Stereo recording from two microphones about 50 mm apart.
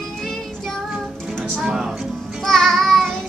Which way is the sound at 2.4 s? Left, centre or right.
Centre.